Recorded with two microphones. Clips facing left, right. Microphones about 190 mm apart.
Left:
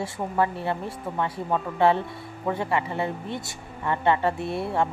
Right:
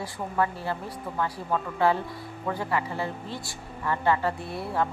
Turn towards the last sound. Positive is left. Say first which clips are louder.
# left 3 dB
turn(degrees=25)  # may be behind; listen again after turning